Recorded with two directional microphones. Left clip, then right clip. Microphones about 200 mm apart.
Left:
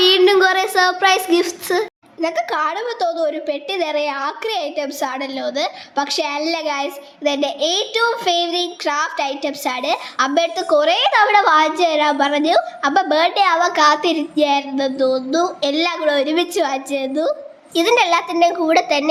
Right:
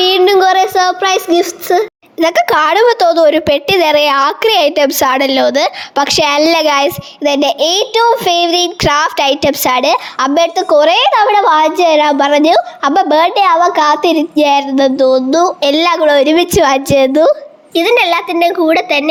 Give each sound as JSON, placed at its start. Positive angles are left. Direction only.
{"t": 0.0, "sound": "a sound", "side_deg": -15}
{"t": 2.1, "sound": "a woman's voice", "side_deg": -50}
{"t": 17.7, "sound": "speech", "side_deg": -20}